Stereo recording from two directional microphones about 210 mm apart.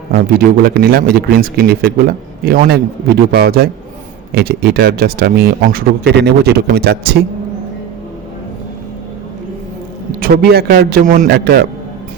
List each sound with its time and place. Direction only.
0.1 s speech: 45° right (ahead or behind)
10.2 s speech: 45° right (ahead or behind)